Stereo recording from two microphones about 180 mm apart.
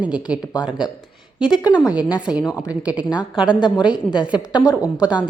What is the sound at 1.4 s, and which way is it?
Speech, 25° left (ahead or behind).